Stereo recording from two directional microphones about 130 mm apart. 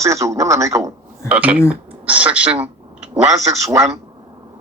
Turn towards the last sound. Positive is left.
turn(degrees=-20)  # may be behind; listen again after turning